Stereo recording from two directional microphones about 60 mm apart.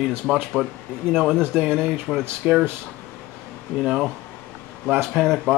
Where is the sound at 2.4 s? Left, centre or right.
Right.